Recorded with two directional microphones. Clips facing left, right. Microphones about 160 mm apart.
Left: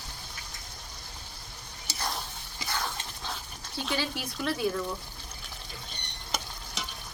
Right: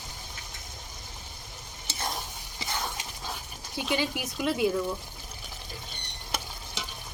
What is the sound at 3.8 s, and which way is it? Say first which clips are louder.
Speech: right 3 dB; 15° right (ahead or behind).